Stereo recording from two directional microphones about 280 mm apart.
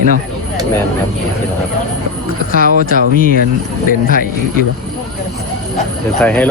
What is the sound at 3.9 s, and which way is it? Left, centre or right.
Speech, left.